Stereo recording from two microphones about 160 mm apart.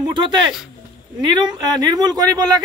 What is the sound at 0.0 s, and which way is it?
Speech, 30° right (ahead or behind).